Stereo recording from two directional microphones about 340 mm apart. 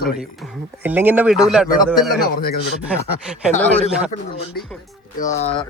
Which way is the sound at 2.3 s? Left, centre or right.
Left.